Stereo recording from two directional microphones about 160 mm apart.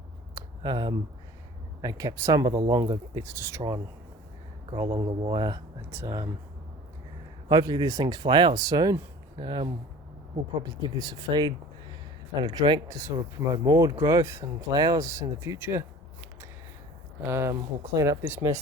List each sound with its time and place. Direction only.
0.3 s a sound: 25° right (ahead or behind)
1.8 s speech: 25° right (ahead or behind)
7.4 s speech: 25° right (ahead or behind)
17.2 s speech: 15° right (ahead or behind)